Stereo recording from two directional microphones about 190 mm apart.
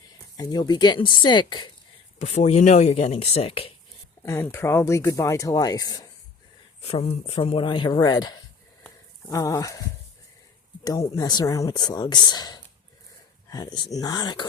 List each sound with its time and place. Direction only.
0.3 s speech: 20° left (ahead or behind)
2.2 s speech: 35° left (ahead or behind)
4.2 s speech: 15° left (ahead or behind)
6.8 s speech: 30° left (ahead or behind); by 9.8 s 15° left (ahead or behind)
10.8 s speech: 20° left (ahead or behind)